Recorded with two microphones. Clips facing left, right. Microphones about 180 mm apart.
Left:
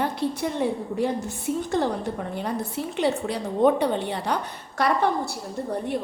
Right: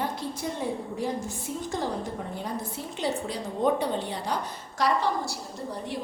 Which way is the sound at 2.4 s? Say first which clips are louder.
Left 5 dB; 65° left (ahead or behind).